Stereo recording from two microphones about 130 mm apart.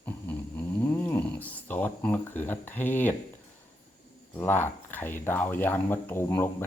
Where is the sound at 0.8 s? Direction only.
15° left (ahead or behind).